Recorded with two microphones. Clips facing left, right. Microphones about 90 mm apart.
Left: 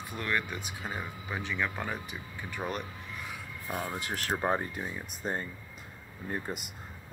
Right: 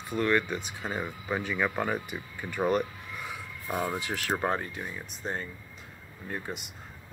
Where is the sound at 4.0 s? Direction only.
40° left (ahead or behind).